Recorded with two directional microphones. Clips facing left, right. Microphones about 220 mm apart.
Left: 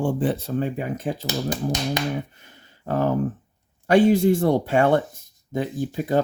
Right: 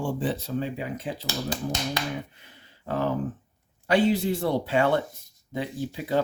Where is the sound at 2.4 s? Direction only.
45° left (ahead or behind).